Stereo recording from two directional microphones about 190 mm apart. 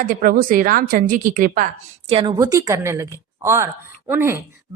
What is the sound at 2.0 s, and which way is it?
A woman's voice, 25° right (ahead or behind).